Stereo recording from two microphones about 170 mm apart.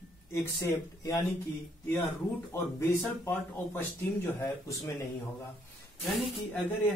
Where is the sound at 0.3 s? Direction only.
20° left (ahead or behind).